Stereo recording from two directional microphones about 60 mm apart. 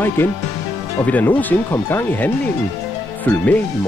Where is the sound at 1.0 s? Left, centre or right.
Left.